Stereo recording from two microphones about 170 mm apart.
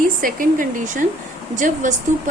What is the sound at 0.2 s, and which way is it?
Speech, 55° right (ahead or behind).